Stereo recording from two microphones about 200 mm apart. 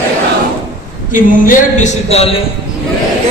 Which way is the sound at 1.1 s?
40° left (ahead or behind).